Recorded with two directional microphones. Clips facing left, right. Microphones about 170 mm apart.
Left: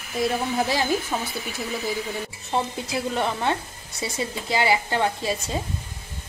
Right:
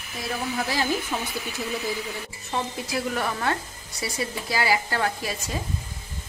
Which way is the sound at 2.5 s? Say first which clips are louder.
Left 2 dB; 25° left (ahead or behind).